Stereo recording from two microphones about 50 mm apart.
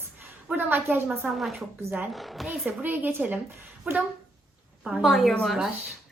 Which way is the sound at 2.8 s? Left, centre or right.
Right.